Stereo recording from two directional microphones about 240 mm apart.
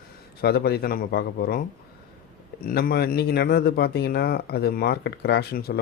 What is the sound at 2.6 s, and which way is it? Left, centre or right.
Speech, left.